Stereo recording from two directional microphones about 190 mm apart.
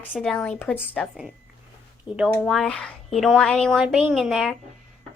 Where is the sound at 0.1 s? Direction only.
5° left (ahead or behind).